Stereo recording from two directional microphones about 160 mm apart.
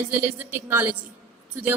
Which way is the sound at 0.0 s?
10° right (ahead or behind).